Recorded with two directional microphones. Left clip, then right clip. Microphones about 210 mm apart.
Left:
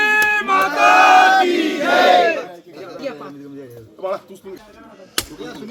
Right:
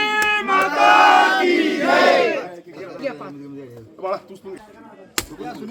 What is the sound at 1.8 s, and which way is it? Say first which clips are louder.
Battle cry: left 2 dB; 10° right (ahead or behind).